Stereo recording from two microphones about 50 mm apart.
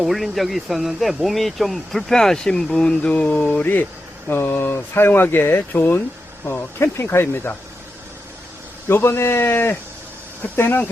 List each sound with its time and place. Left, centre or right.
0.0 s speech: centre
3.1 s speech: left
4.3 s speech: left
8.9 s speech: left